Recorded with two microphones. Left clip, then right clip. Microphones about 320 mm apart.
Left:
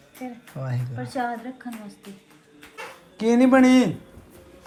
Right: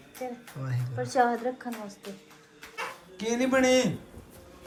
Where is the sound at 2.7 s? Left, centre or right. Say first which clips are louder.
Even; centre.